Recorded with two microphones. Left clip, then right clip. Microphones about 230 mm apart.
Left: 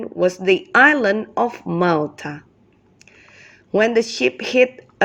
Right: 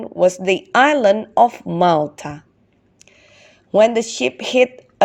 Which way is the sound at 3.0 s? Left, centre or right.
Centre.